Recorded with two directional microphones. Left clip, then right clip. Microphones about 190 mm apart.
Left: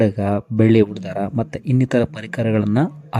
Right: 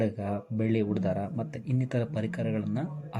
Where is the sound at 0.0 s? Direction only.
40° left (ahead or behind).